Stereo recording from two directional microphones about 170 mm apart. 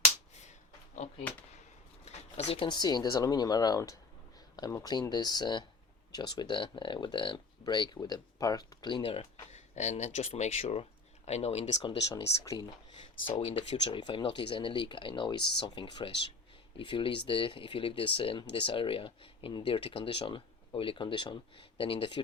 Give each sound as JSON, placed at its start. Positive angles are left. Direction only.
{"t": 1.0, "sound": "speech", "side_deg": 40}
{"t": 11.9, "sound": "speech", "side_deg": 20}
{"t": 13.3, "sound": "speech", "side_deg": 40}